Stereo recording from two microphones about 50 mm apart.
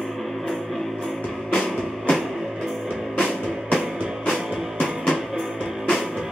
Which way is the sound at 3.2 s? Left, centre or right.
Centre.